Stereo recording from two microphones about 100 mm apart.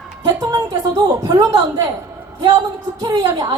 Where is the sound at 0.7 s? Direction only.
35° right (ahead or behind).